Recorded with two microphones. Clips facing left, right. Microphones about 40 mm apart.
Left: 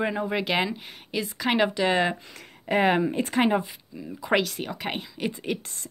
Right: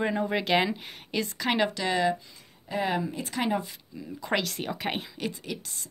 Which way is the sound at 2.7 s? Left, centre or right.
Left.